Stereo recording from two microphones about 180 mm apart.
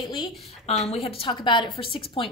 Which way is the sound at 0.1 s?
20° left (ahead or behind).